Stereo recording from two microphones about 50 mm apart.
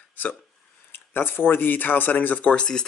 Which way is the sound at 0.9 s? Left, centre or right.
Left.